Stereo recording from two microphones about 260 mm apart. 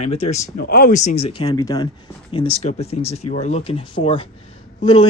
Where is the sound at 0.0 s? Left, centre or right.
Left.